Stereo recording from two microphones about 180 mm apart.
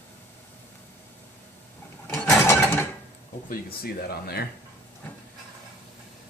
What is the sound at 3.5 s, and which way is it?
Speech, 60° left (ahead or behind).